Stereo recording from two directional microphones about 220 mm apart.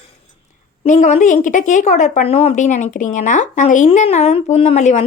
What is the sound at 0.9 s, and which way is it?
A woman's voice, 30° left (ahead or behind).